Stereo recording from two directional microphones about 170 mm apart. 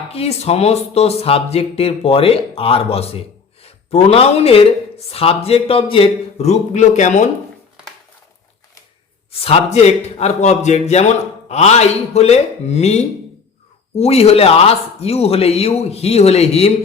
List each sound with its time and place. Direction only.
0.1 s speech: 35° left (ahead or behind)
9.4 s speech: 35° left (ahead or behind)